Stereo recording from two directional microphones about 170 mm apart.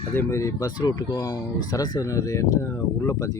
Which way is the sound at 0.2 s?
15° left (ahead or behind).